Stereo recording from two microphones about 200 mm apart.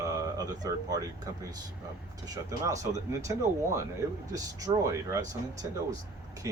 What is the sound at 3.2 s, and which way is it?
Speech, 15° right (ahead or behind).